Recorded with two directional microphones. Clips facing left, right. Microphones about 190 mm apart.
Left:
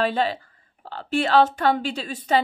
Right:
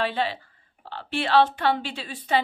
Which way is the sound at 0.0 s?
45° left (ahead or behind).